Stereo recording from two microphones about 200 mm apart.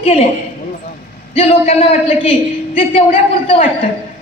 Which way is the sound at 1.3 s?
30° left (ahead or behind).